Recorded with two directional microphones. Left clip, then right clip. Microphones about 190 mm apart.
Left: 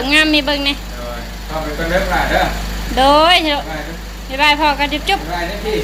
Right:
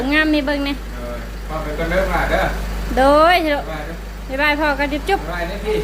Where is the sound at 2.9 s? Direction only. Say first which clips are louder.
Left 2 dB; 25° right (ahead or behind).